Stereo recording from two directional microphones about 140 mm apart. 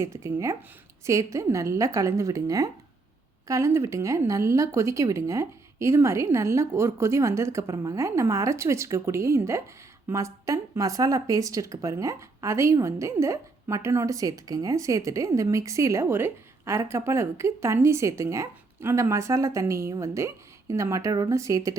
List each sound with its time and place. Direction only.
0.0 s a woman's voice: 20° right (ahead or behind)